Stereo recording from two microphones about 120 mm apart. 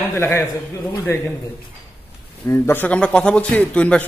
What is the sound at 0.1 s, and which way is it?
A man's voice, 20° left (ahead or behind).